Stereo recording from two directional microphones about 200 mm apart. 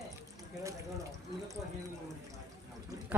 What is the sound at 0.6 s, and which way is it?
Speech, 15° right (ahead or behind).